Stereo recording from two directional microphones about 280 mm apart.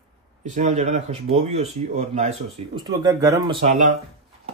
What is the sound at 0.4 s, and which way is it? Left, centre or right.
Speech, right.